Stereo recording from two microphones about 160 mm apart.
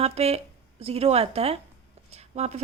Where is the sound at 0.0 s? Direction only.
40° right (ahead or behind).